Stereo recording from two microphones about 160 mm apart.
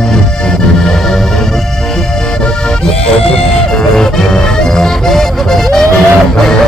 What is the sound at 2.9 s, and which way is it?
Music, 40° left (ahead or behind).